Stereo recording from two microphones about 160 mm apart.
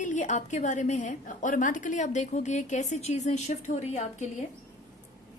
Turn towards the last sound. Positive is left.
turn(degrees=45)  # may be behind; listen again after turning